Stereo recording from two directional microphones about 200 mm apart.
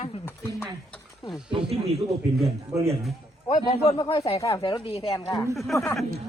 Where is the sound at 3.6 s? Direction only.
25° left (ahead or behind).